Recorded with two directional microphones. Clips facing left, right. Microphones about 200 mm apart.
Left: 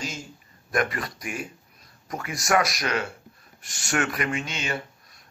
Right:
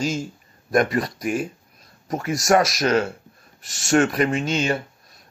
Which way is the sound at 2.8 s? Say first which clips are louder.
Right 8 dB; 45° right (ahead or behind).